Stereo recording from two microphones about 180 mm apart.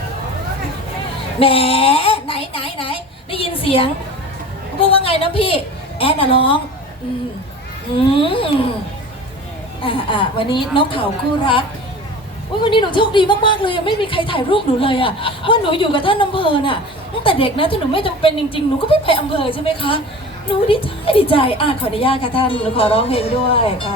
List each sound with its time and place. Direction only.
1.4 s speech: 30° left (ahead or behind)
4.9 s a woman's voice: 30° left (ahead or behind)
7.9 s a woman's voice: 30° left (ahead or behind)
9.8 s a woman's voice: 30° left (ahead or behind)
12.7 s a woman's voice: 25° left (ahead or behind)